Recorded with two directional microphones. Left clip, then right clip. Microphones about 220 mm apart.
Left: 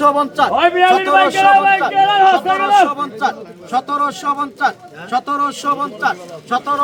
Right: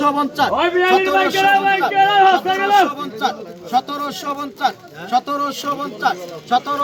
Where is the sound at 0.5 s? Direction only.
40° left (ahead or behind).